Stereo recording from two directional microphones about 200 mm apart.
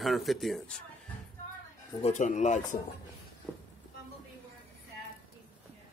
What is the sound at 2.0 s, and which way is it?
Speech, 35° left (ahead or behind).